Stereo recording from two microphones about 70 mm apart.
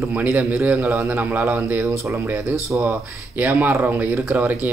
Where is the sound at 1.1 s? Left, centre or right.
Right.